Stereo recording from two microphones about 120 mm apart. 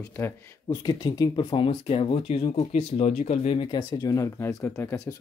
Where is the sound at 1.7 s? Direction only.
55° left (ahead or behind).